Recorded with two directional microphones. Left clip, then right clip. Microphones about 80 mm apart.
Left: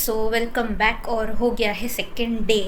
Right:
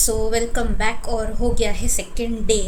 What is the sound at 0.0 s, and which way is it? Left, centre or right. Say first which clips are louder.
A woman's voice: right 1 dB; right.